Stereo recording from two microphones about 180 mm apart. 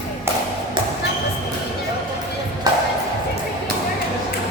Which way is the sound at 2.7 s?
20° right (ahead or behind).